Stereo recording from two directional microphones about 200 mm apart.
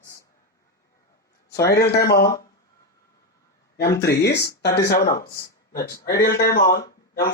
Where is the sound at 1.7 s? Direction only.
55° left (ahead or behind).